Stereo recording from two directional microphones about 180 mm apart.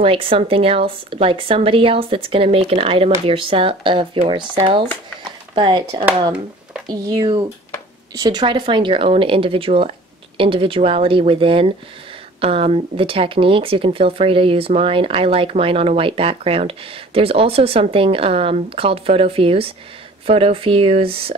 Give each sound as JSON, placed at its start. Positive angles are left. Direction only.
{"t": 0.0, "sound": "speech", "side_deg": -30}